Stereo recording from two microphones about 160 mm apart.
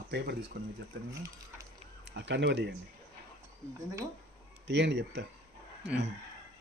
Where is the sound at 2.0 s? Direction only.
90° right.